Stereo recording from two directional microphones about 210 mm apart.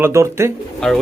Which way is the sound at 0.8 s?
Centre (ahead or behind).